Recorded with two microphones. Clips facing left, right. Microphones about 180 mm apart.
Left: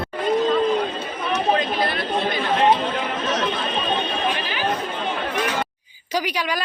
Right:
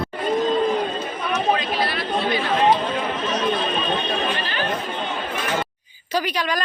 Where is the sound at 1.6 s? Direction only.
50° left (ahead or behind).